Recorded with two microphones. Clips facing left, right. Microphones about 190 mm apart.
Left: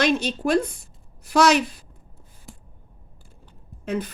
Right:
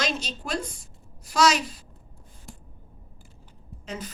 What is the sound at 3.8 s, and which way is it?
Speech, 60° left (ahead or behind).